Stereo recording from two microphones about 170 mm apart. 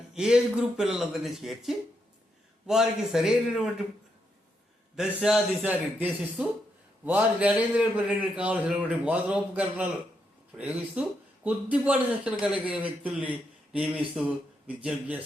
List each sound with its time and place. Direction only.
0.1 s speech: 5° right (ahead or behind)
4.9 s a man's voice: 5° right (ahead or behind)